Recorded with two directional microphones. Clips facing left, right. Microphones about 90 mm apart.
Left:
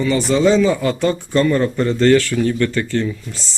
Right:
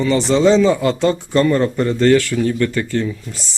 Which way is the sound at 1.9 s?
10° right (ahead or behind).